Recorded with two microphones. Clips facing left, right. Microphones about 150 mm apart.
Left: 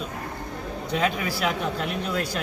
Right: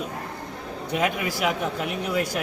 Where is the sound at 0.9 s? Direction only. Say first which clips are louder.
Right 1 dB; 15° right (ahead or behind).